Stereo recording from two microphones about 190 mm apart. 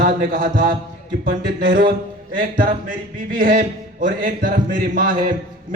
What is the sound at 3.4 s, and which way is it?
A man's voice, 50° right (ahead or behind).